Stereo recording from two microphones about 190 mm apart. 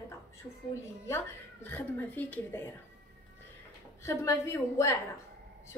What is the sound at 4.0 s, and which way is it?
Speech, 15° left (ahead or behind).